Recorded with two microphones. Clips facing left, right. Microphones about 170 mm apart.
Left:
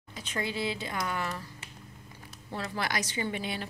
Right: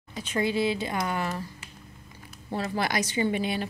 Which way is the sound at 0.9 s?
25° right (ahead or behind).